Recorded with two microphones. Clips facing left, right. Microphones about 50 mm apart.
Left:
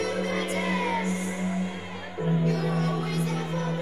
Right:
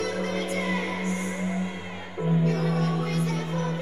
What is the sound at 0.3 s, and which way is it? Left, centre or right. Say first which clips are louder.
Music: even; left.